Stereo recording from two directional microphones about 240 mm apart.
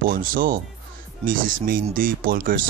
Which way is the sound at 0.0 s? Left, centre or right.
Right.